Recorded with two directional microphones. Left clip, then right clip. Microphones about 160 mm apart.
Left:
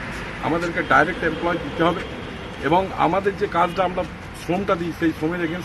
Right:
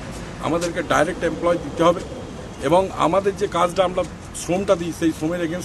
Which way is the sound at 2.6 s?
35° right (ahead or behind).